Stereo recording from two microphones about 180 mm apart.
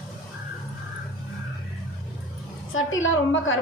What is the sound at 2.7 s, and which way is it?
Speech, 90° left.